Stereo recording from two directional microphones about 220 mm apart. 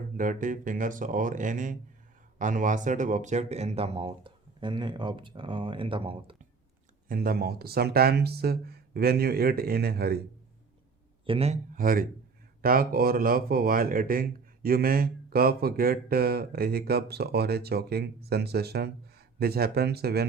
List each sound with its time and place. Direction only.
0.2 s speech: 35° right (ahead or behind)
7.1 s speech: 40° right (ahead or behind)
11.3 s speech: 25° right (ahead or behind); by 20.2 s 45° right (ahead or behind)